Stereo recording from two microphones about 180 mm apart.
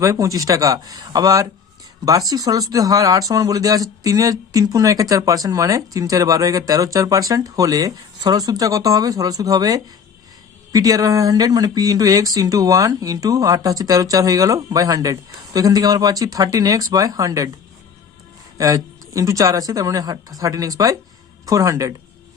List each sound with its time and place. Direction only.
0.0 s speech: 15° right (ahead or behind)
18.5 s speech: 20° right (ahead or behind)